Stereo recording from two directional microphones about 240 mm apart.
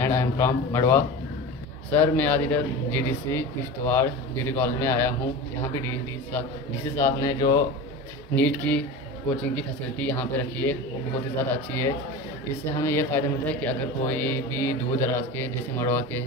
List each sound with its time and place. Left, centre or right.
0.0 s a man's voice: centre